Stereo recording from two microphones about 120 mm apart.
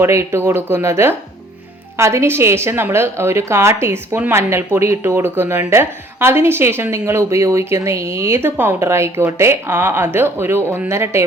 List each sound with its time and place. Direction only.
0.0 s a woman's voice: 25° right (ahead or behind)